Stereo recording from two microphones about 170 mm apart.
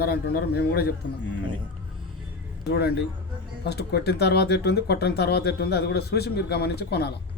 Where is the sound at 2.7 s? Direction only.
70° left (ahead or behind).